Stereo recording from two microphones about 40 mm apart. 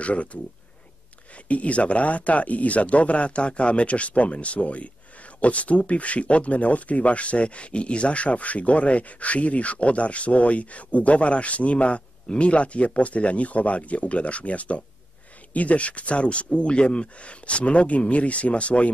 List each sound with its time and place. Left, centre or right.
0.0 s speech: left